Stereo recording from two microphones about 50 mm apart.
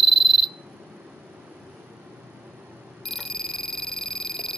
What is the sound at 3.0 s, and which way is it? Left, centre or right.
Alarm, centre.